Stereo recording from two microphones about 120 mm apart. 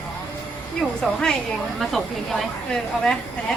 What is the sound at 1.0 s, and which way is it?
A woman's voice, 5° left (ahead or behind).